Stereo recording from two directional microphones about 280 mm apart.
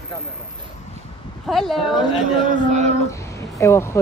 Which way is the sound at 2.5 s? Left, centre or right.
Right.